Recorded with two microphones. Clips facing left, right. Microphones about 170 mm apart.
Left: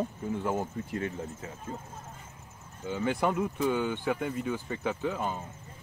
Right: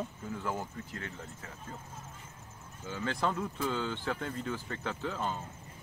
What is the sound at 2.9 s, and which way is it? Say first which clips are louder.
Speech: left 5 dB; 15° left (ahead or behind).